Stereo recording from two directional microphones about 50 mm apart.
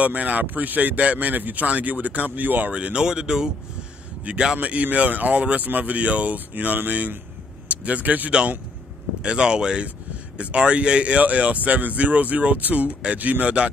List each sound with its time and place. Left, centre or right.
0.0 s speech: right
2.7 s speech: right
4.6 s a man's voice: right
9.2 s speech: centre